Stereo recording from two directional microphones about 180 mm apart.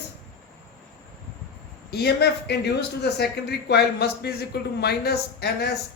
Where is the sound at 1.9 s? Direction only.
65° left (ahead or behind).